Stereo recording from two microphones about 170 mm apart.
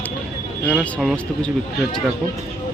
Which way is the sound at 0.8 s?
5° left (ahead or behind).